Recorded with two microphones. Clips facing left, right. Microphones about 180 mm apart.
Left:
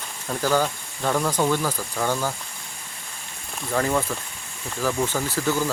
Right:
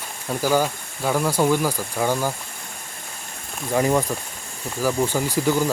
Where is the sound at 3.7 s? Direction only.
15° right (ahead or behind).